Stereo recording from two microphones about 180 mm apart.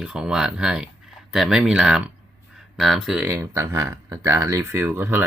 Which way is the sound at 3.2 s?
15° right (ahead or behind).